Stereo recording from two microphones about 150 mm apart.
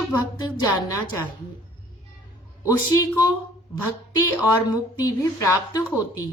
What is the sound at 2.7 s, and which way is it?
Speech, 25° left (ahead or behind).